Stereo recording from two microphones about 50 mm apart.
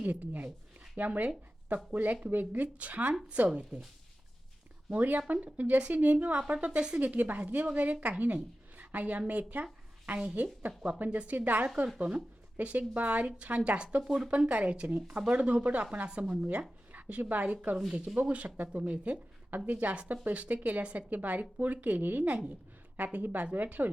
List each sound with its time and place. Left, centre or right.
0.0 s speech: right
4.9 s speech: right
7.0 s speech: right; by 14.3 s centre
14.3 s speech: right
16.0 s speech: right
18.5 s speech: right
18.8 s speech: right